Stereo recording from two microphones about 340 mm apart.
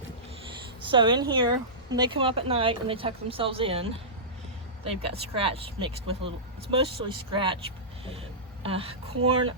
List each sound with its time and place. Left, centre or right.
0.9 s speech: centre
5.4 s speech: centre
8.6 s speech: centre